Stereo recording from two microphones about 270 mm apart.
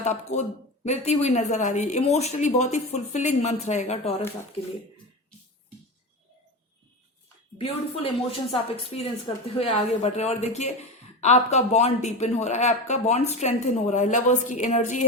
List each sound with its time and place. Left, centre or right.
0.0 s speech: left
7.6 s speech: left